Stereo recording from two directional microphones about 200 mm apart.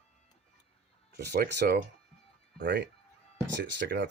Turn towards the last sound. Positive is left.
turn(degrees=-60)  # may be behind; listen again after turning